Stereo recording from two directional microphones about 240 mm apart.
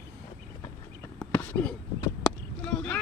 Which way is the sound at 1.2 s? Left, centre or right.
Centre.